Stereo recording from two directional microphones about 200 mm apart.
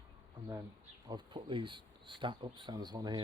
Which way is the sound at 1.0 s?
20° right (ahead or behind).